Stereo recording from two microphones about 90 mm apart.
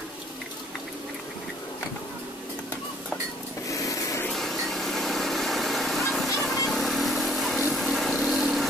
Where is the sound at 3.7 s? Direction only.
35° left (ahead or behind).